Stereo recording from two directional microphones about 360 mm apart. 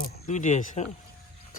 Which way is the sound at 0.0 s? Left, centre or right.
Centre.